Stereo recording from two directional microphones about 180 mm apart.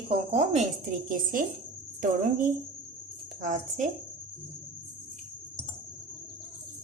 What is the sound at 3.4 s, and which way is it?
Speech, 45° right (ahead or behind).